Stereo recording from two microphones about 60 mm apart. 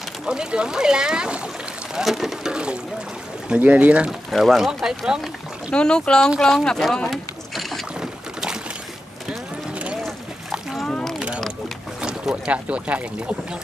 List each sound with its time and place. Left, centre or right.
0.2 s speech: centre
2.5 s speech: centre
4.3 s speech: centre
4.8 s speech: centre
5.7 s speech: centre
7.1 s a sound: centre
8.0 s boat: centre
10.9 s mechanisms: centre
12.0 s speech: centre